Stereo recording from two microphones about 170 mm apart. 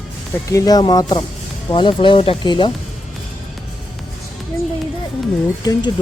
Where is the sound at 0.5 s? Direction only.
20° left (ahead or behind).